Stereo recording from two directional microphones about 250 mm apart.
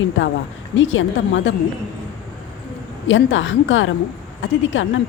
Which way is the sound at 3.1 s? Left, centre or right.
Left.